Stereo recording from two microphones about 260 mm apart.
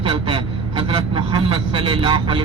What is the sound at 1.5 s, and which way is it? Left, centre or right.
Speech, centre.